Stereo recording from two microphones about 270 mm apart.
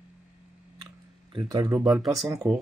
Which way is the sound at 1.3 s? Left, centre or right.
Centre.